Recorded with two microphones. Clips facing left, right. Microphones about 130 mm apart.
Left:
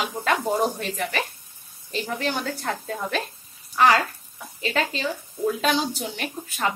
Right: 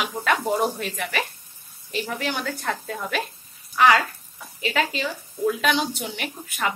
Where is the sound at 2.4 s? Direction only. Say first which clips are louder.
Even; 25° left (ahead or behind).